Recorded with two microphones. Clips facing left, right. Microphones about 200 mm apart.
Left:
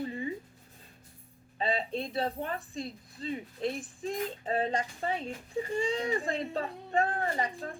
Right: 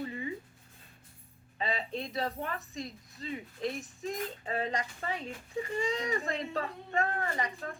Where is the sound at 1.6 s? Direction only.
30° left (ahead or behind).